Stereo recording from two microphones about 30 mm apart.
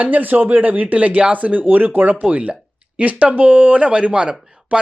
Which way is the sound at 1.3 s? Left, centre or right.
Right.